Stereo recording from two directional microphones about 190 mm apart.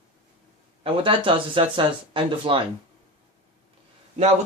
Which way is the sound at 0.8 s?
25° right (ahead or behind).